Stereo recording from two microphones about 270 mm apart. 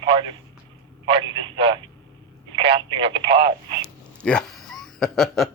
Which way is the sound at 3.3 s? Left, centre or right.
Right.